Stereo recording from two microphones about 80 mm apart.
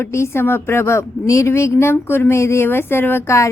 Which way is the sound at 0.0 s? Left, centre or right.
Left.